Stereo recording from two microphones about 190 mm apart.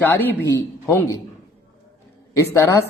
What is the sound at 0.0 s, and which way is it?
A man's voice, 10° left (ahead or behind).